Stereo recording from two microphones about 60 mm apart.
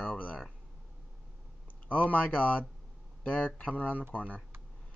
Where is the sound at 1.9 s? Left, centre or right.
Left.